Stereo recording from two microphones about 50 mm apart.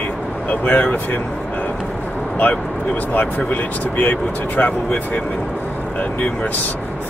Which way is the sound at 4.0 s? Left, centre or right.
Left.